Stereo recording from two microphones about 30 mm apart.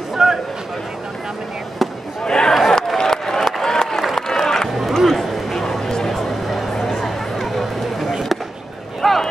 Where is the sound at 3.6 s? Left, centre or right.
Centre.